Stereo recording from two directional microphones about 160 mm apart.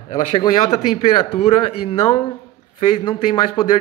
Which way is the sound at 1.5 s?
40° left (ahead or behind).